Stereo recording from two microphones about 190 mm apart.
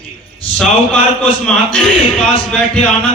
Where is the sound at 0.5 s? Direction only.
5° left (ahead or behind).